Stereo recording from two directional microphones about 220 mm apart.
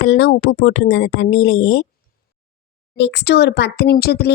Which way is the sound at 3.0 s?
50° left (ahead or behind).